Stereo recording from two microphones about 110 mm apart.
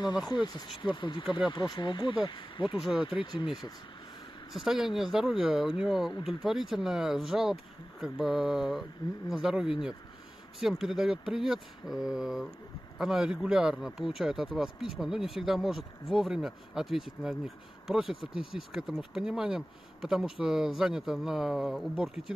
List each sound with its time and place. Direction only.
0.5 s speech: 45° left (ahead or behind)
4.6 s speech: 5° right (ahead or behind)